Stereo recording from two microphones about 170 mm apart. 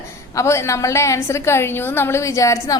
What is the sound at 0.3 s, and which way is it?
A woman's voice, 15° left (ahead or behind).